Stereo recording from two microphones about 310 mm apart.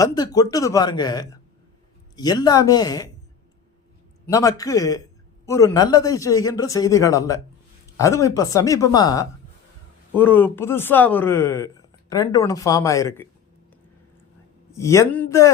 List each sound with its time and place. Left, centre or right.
0.0 s speech: centre
4.3 s speech: centre
14.8 s speech: centre